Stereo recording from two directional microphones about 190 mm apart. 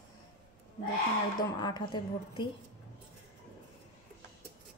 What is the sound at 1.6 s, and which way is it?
Speech, 25° left (ahead or behind).